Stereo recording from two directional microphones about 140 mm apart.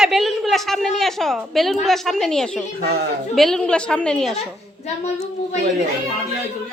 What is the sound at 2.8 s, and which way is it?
Speech, 90° right.